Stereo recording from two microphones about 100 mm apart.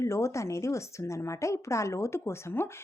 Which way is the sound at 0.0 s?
30° left (ahead or behind).